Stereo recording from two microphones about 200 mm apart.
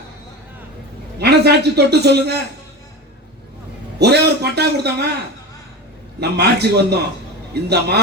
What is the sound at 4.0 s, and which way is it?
Speech, 55° right (ahead or behind).